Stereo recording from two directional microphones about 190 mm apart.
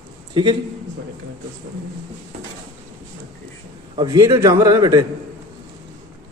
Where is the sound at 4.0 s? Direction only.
20° right (ahead or behind).